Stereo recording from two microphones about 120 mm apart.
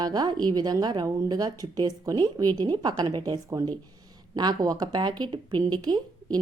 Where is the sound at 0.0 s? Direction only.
35° right (ahead or behind).